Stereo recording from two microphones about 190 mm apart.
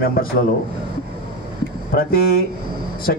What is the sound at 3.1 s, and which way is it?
Speech, 55° left (ahead or behind).